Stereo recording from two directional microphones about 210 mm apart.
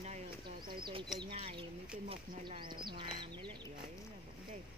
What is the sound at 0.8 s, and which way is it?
Speech, 20° right (ahead or behind).